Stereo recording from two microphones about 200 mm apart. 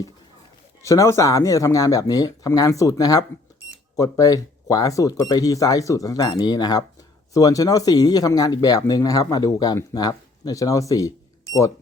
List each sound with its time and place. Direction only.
0.8 s speech: 15° left (ahead or behind)